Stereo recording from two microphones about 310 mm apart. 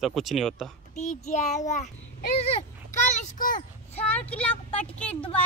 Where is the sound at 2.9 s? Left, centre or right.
Left.